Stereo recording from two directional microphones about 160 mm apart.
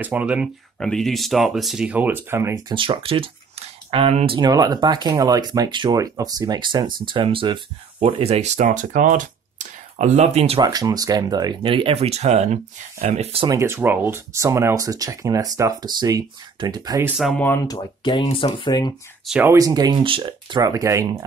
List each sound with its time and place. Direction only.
0.0 s speech: 10° right (ahead or behind)
0.7 s speech: 5° left (ahead or behind); by 2.6 s 15° right (ahead or behind)
2.7 s speech: 30° right (ahead or behind)
4.4 s speech: 25° right (ahead or behind); by 8.6 s 45° right (ahead or behind)
8.6 s speech: 55° right (ahead or behind); by 10.6 s 40° right (ahead or behind)
10.6 s speech: 25° right (ahead or behind)
13.5 s speech: 15° right (ahead or behind)
17.2 s speech: 10° left (ahead or behind)
17.7 s speech: 30° left (ahead or behind)
19.2 s speech: 5° right (ahead or behind)
19.5 s speech: 20° right (ahead or behind)